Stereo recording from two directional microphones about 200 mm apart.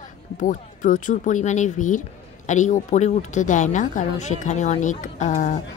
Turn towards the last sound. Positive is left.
turn(degrees=35)  # may be behind; listen again after turning